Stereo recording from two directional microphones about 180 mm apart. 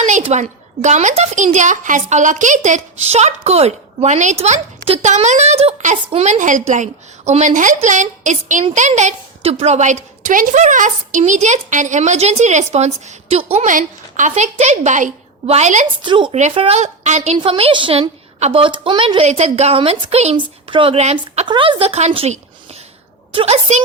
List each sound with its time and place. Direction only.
0.0 s a woman's voice: 40° right (ahead or behind)
16.0 s a woman's voice: 25° right (ahead or behind)
21.4 s a woman's voice: 25° right (ahead or behind)